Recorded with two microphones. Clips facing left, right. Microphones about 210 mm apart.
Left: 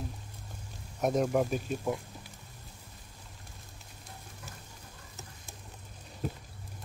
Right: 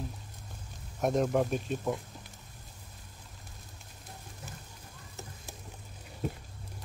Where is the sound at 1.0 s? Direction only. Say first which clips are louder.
Even; centre (ahead or behind).